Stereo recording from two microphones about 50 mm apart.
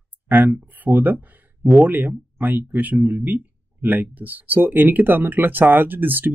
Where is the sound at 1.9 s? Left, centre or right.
Right.